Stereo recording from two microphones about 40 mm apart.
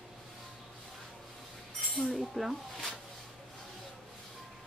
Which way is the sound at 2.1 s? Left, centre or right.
Centre.